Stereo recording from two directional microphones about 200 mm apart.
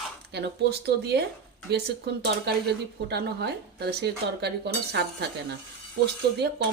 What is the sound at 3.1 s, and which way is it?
A woman's voice, 55° right (ahead or behind).